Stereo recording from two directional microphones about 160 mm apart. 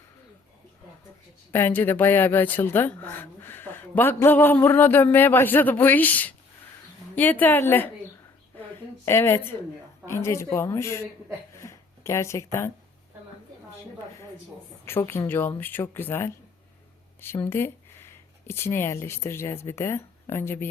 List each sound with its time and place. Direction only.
1.5 s speech: 15° left (ahead or behind)
9.0 s speech: 15° left (ahead or behind)
11.5 s a sound: 20° left (ahead or behind)
14.8 s speech: 15° left (ahead or behind)